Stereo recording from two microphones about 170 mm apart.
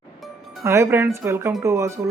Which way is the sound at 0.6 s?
15° right (ahead or behind).